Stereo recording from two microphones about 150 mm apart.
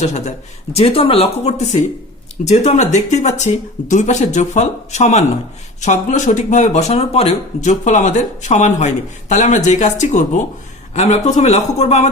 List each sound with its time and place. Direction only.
0.0 s speech: 50° left (ahead or behind)